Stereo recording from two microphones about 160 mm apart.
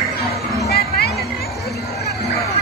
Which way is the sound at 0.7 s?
85° left.